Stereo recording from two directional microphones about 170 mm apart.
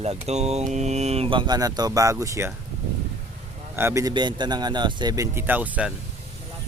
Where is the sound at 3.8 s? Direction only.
15° right (ahead or behind).